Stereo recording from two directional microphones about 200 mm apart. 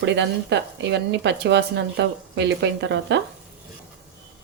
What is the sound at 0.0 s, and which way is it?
A woman's voice, 60° right (ahead or behind).